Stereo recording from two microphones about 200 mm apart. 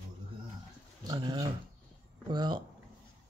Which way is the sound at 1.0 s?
20° right (ahead or behind).